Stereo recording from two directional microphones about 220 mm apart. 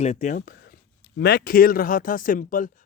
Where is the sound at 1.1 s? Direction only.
45° left (ahead or behind).